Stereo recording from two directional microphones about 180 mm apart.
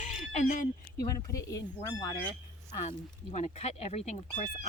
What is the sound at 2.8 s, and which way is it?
Speech, 40° left (ahead or behind).